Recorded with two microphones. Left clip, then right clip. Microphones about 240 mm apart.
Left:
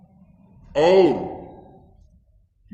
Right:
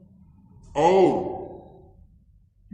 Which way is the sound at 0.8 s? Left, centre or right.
Left.